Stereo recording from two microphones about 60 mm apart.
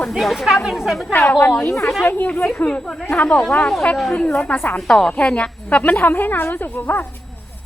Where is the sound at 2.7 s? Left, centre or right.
Left.